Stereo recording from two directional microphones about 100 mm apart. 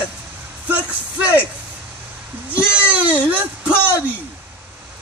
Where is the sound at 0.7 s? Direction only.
15° right (ahead or behind).